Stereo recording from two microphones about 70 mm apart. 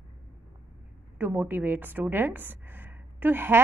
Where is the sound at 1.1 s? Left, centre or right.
Right.